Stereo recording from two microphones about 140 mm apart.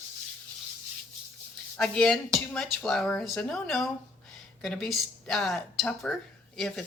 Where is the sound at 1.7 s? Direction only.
5° left (ahead or behind).